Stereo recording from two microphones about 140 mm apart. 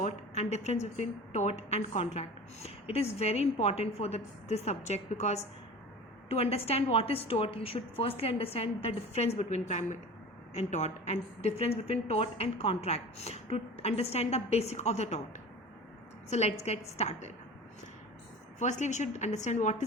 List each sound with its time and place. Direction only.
0.0 s a woman's voice: 55° left (ahead or behind)
16.3 s a woman's voice: 50° left (ahead or behind)
18.6 s a woman's voice: 55° left (ahead or behind)